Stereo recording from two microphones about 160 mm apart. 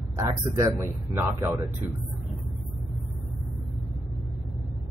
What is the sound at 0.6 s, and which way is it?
Speech, 15° right (ahead or behind).